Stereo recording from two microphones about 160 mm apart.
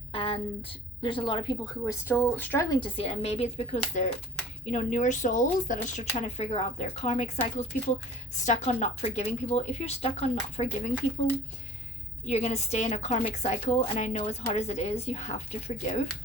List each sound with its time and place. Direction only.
0.1 s a woman's voice: 35° left (ahead or behind)
1.8 s speech: 15° left (ahead or behind)
2.6 s a woman's voice: 35° left (ahead or behind); by 6.1 s 55° left (ahead or behind)
6.1 s a woman's voice: 45° left (ahead or behind)
12.2 s a woman's voice: 45° left (ahead or behind)